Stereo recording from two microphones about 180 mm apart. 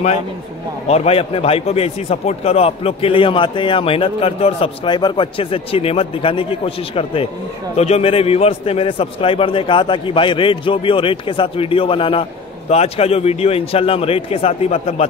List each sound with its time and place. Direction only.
0.8 s a man's voice: 35° left (ahead or behind)